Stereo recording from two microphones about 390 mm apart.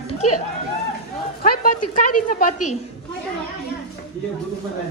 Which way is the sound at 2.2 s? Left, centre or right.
Left.